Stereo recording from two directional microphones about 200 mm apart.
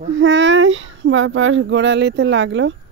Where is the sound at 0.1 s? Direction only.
70° right (ahead or behind).